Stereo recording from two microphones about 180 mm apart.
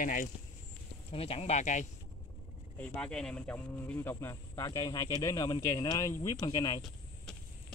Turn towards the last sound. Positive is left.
turn(degrees=0)  # may be behind; listen again after turning